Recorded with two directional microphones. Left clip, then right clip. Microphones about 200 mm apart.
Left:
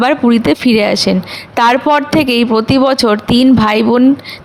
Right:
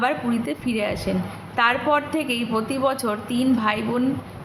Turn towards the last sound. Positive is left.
turn(degrees=55)  # may be behind; listen again after turning